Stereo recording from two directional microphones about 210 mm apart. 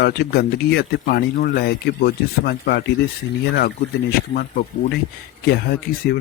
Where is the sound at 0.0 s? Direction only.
50° left (ahead or behind).